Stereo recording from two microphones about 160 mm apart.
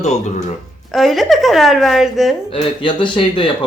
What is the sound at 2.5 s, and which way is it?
Speech, 35° left (ahead or behind).